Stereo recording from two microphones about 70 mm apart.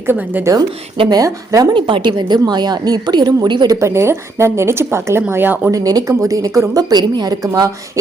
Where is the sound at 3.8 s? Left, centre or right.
Right.